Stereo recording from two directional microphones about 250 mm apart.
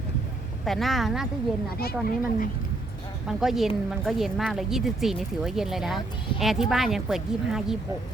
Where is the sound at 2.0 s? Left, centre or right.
Left.